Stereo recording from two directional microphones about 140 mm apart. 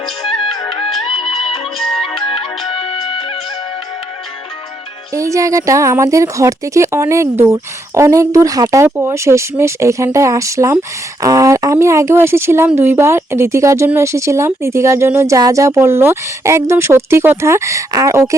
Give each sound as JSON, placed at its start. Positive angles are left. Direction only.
{"t": 0.2, "sound": "music", "side_deg": 0}
{"t": 1.0, "sound": "music", "side_deg": 40}
{"t": 1.5, "sound": "music", "side_deg": 0}
{"t": 2.0, "sound": "music", "side_deg": 40}
{"t": 5.1, "sound": "speech", "side_deg": -20}